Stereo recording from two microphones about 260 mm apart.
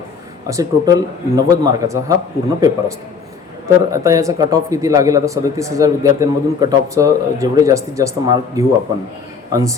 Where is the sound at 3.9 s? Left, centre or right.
Centre.